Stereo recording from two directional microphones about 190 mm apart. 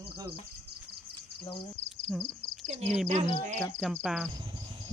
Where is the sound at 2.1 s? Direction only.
Centre (ahead or behind).